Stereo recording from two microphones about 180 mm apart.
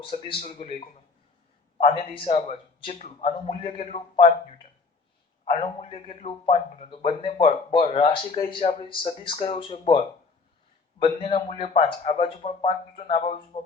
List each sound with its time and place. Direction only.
0.0 s a man's voice: 30° left (ahead or behind)
11.0 s a man's voice: 30° left (ahead or behind)